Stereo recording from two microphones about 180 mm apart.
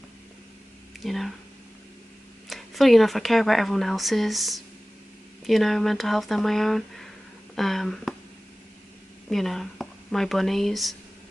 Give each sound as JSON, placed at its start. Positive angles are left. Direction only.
{"t": 1.0, "sound": "speech", "side_deg": 0}
{"t": 2.5, "sound": "speech", "side_deg": 0}
{"t": 9.3, "sound": "speech", "side_deg": 0}